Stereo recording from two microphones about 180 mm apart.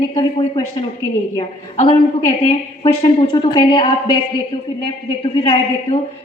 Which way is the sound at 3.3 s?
25° left (ahead or behind).